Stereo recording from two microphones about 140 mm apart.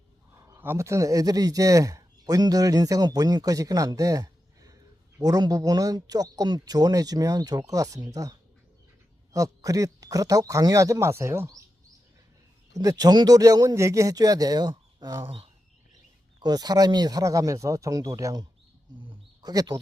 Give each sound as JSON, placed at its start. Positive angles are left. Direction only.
{"t": 0.3, "sound": "a man's voice", "side_deg": -20}
{"t": 12.7, "sound": "a man's voice", "side_deg": -25}
{"t": 16.4, "sound": "a man's voice", "side_deg": -30}
{"t": 19.0, "sound": "a sound", "side_deg": -30}